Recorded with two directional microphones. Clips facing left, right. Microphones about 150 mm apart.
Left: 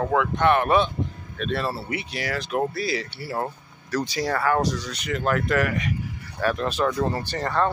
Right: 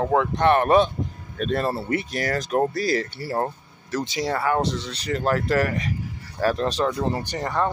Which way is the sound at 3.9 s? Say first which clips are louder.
Even; 20° right (ahead or behind).